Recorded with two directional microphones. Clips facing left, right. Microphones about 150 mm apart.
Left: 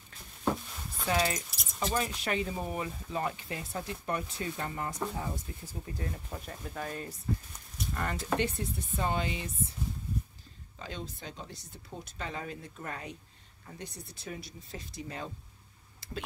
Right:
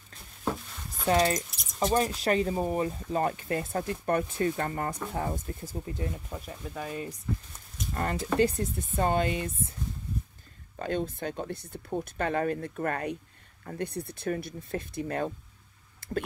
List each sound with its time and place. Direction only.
1.0 s speech: 35° right (ahead or behind)
1.5 s a sound: centre (ahead or behind)
2.0 s speech: 35° right (ahead or behind)
6.1 s speech: 5° right (ahead or behind)
7.9 s speech: 40° right (ahead or behind)
10.8 s speech: 55° right (ahead or behind)
16.0 s a sound: 50° right (ahead or behind)